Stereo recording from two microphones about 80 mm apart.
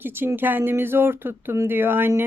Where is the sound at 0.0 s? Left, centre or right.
Right.